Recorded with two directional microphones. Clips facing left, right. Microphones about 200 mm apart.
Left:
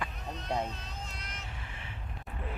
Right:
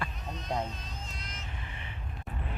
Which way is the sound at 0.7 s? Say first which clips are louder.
Even; 65° left (ahead or behind).